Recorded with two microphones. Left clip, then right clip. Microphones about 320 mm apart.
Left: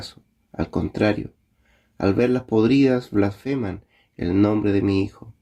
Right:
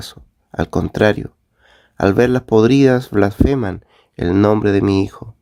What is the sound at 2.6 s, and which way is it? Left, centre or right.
Speech, right.